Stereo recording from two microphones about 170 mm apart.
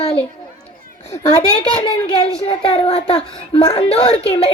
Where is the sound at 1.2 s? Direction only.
20° left (ahead or behind).